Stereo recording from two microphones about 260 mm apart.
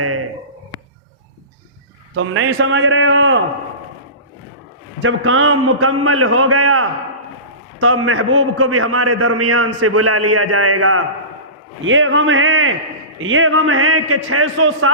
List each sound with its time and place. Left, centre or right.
2.1 s a man's voice: right
5.0 s a man's voice: right